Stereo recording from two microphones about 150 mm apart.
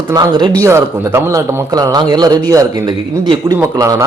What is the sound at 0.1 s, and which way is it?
A man's voice, 30° right (ahead or behind).